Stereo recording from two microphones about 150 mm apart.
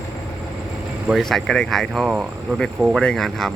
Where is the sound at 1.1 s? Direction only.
Centre (ahead or behind).